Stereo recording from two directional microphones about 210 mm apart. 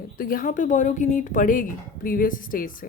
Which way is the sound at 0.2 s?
40° left (ahead or behind).